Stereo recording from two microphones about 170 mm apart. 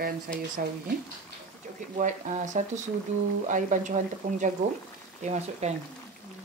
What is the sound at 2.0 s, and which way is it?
Speech, 45° right (ahead or behind).